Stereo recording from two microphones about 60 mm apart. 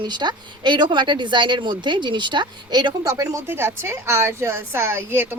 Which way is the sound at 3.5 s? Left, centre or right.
Right.